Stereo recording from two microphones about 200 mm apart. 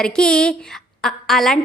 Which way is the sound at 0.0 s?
5° left (ahead or behind).